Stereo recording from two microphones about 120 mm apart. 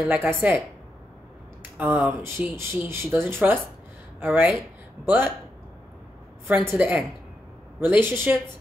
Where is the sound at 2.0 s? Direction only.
15° right (ahead or behind).